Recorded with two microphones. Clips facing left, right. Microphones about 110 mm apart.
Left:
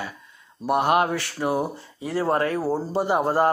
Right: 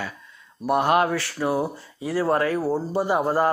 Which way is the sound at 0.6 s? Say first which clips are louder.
Even; 20° left (ahead or behind).